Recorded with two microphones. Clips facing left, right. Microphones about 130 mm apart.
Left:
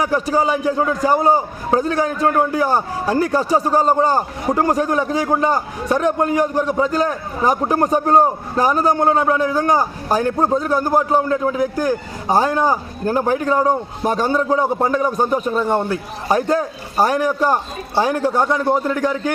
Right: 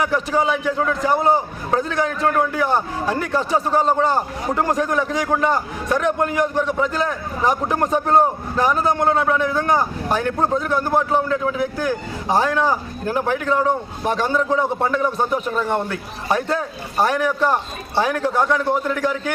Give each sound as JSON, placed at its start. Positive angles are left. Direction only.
{"t": 0.0, "sound": "a man's voice", "side_deg": 35}
{"t": 0.8, "sound": "a man's voice", "side_deg": 20}
{"t": 1.8, "sound": "a man's voice", "side_deg": 40}